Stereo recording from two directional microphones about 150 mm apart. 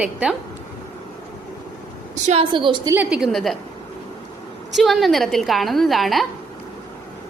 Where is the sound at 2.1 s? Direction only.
50° right (ahead or behind).